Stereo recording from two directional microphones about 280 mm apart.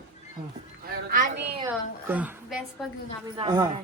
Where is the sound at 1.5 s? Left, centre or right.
Centre.